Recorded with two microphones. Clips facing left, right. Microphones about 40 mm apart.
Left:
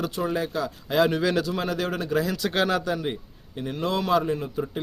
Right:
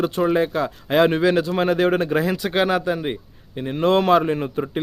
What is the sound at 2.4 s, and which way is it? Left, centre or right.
A man's voice, centre.